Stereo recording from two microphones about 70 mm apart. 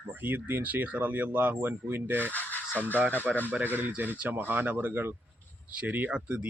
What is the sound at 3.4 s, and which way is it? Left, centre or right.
Speech, right.